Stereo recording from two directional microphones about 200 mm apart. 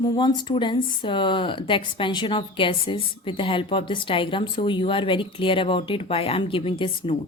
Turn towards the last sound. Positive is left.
turn(degrees=25)  # may be behind; listen again after turning